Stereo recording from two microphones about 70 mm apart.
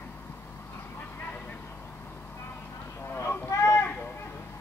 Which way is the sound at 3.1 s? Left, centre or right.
Left.